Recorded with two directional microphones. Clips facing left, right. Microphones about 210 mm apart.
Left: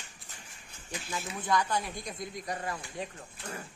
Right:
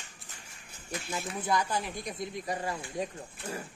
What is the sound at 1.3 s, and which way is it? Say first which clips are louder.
Speech: left 1 dB; 10° right (ahead or behind).